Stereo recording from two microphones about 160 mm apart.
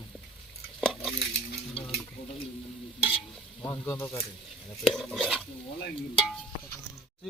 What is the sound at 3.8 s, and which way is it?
Speech, 15° left (ahead or behind).